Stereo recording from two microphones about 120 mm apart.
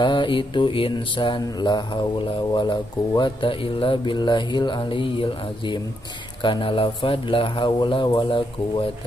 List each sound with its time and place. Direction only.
0.0 s mantra: 40° left (ahead or behind)
6.4 s speech: 45° left (ahead or behind)